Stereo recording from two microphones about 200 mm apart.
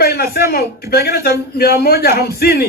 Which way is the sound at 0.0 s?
50° left (ahead or behind).